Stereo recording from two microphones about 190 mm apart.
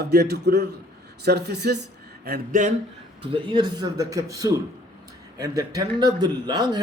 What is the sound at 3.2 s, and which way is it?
A man's voice, 25° right (ahead or behind).